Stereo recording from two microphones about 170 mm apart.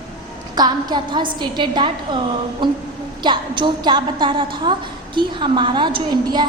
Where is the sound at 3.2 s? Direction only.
25° right (ahead or behind).